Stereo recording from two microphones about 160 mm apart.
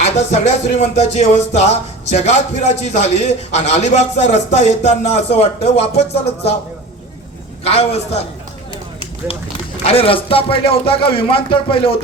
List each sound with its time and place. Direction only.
0.0 s speech: 45° left (ahead or behind)
7.6 s speech: 40° left (ahead or behind)
9.8 s speech: 35° left (ahead or behind)